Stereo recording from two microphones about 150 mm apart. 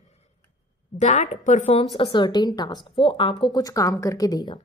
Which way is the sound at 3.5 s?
25° left (ahead or behind).